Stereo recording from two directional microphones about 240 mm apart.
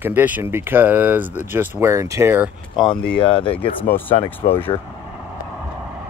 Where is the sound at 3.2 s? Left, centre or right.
Left.